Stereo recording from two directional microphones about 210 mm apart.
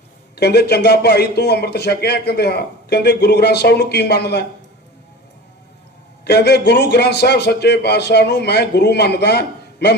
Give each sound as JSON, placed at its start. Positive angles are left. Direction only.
{"t": 0.3, "sound": "a man's voice", "side_deg": 50}
{"t": 6.2, "sound": "a man's voice", "side_deg": 55}